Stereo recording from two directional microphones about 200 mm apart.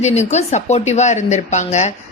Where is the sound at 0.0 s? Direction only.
35° left (ahead or behind).